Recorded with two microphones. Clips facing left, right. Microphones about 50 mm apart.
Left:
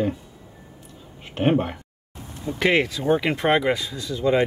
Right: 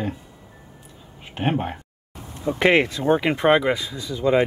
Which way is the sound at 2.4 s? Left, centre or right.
Right.